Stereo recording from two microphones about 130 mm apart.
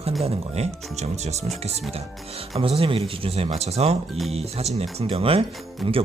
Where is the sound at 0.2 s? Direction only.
50° right (ahead or behind).